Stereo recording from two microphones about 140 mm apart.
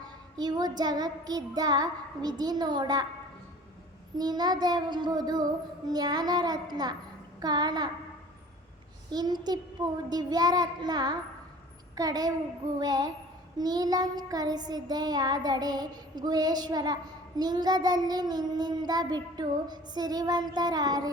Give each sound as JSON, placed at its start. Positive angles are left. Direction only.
{"t": 0.3, "sound": "child singing", "side_deg": -30}
{"t": 4.2, "sound": "child singing", "side_deg": -30}
{"t": 9.0, "sound": "child singing", "side_deg": -30}